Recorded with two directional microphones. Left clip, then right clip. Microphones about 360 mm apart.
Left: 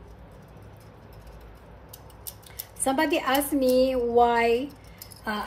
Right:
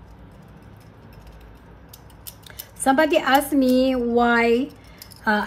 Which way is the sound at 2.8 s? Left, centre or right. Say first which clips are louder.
Right 7 dB; right.